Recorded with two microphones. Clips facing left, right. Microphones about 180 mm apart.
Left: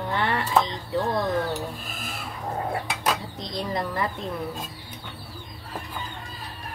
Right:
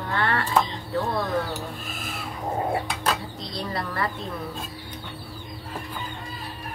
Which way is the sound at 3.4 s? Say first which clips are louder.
Left 2 dB; 20° left (ahead or behind).